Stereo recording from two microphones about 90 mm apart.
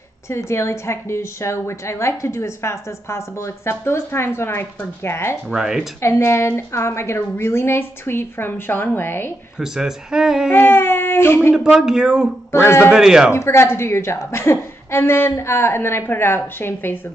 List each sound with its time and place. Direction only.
0.3 s a woman's voice: 30° left (ahead or behind)
5.5 s speech: 5° right (ahead or behind)
6.0 s a woman's voice: 30° left (ahead or behind)
9.6 s speech: 5° right (ahead or behind)
10.5 s speech: 25° left (ahead or behind)
11.5 s speech: 5° right (ahead or behind)
12.5 s a woman's voice: 25° left (ahead or behind)
12.9 s speech: 5° right (ahead or behind)
13.3 s a woman's voice: 30° left (ahead or behind)